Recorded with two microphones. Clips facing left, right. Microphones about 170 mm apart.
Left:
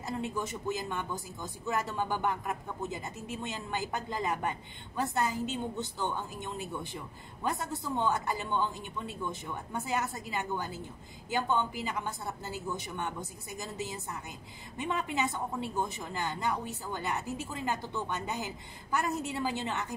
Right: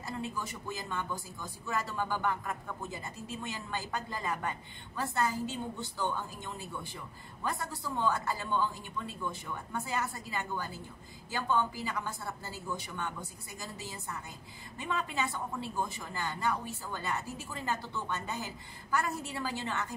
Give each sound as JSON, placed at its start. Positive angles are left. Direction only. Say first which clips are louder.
{"t": 0.0, "sound": "speech", "louder": "left 3 dB", "side_deg": 20}